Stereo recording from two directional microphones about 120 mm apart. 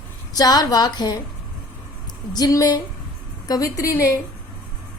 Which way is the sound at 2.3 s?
30° left (ahead or behind).